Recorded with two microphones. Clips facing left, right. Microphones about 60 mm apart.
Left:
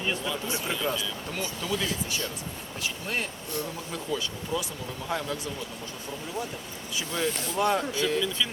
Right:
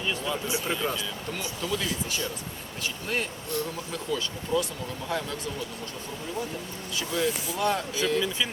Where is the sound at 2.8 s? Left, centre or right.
Centre.